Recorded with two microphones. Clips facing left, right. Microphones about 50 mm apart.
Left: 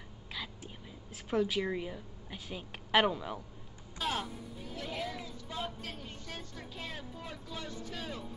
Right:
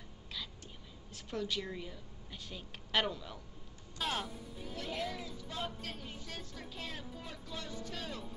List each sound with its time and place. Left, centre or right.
1.1 s a woman's voice: centre
4.0 s music: centre